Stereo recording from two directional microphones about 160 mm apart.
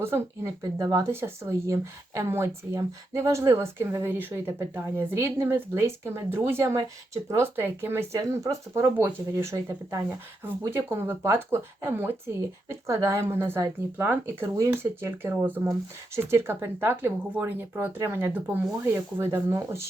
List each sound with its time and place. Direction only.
0.0 s speech: 15° right (ahead or behind)